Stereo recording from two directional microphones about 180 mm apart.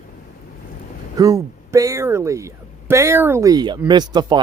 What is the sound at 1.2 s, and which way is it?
Speech, 20° right (ahead or behind).